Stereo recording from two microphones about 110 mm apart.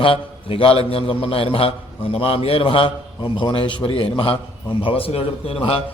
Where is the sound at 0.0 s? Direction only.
55° left (ahead or behind).